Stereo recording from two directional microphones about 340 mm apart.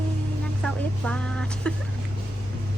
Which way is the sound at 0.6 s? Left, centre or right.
Centre.